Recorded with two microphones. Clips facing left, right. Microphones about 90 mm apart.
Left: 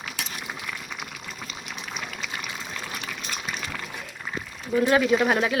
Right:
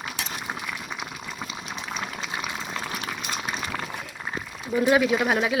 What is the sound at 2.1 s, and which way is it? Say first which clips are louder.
Water: right 3 dB; 25° right (ahead or behind).